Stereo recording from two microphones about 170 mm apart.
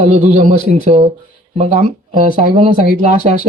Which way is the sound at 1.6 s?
30° right (ahead or behind).